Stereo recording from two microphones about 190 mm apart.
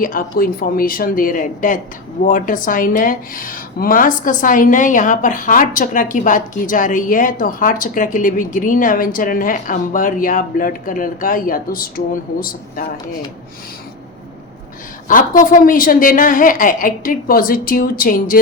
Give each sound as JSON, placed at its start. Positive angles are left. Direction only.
{"t": 0.0, "sound": "a woman's voice", "side_deg": 45}
{"t": 15.0, "sound": "a woman's voice", "side_deg": 45}